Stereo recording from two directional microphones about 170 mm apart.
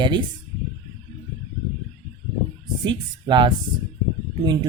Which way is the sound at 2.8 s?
25° right (ahead or behind).